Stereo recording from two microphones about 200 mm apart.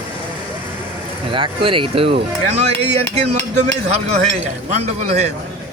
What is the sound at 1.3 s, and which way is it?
Speech, 25° right (ahead or behind).